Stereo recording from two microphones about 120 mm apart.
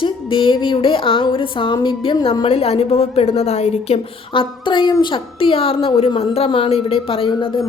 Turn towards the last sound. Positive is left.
turn(degrees=50)  # may be behind; listen again after turning